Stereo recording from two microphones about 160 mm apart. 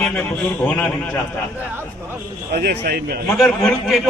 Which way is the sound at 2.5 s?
85° right.